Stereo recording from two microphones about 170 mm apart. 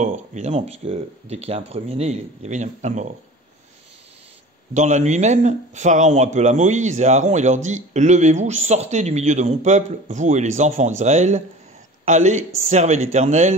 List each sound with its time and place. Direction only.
0.0 s speech: 45° right (ahead or behind)
4.7 s speech: 45° right (ahead or behind)